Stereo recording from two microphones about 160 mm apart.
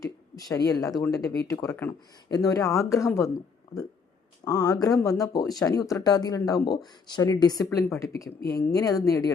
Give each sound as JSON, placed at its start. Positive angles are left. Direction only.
{"t": 0.0, "sound": "speech", "side_deg": 20}
{"t": 4.4, "sound": "speech", "side_deg": 25}